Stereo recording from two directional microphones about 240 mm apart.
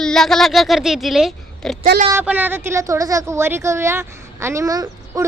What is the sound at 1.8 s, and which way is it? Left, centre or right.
Speech, right.